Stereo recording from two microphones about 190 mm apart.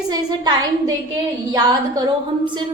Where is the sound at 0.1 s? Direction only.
20° right (ahead or behind).